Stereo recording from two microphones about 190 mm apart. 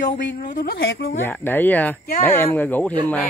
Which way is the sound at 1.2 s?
10° left (ahead or behind).